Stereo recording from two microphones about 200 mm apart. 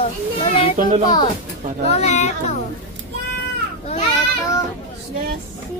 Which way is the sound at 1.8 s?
35° left (ahead or behind).